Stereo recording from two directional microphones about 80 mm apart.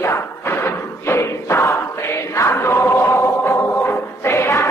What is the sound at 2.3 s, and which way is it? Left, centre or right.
Chant, left.